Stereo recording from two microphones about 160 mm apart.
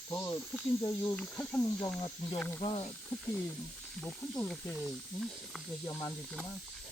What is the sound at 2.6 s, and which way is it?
Speech, 40° left (ahead or behind).